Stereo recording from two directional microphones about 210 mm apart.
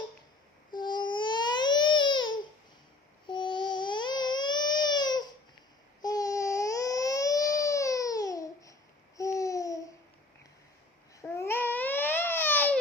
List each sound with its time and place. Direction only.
0.7 s babbling: 20° left (ahead or behind)
3.2 s a sound: 20° left (ahead or behind)
9.1 s babbling: 15° left (ahead or behind)
11.2 s baby cry: 10° left (ahead or behind)